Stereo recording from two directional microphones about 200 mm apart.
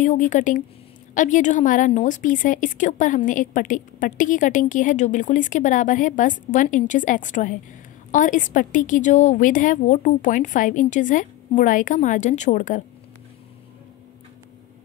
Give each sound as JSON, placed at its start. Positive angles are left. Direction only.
{"t": 0.0, "sound": "a woman's voice", "side_deg": 40}